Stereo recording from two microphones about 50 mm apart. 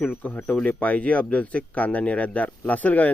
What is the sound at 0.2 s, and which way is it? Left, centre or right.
Speech, left.